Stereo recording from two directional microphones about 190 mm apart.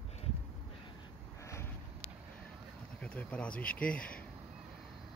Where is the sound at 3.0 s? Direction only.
5° left (ahead or behind).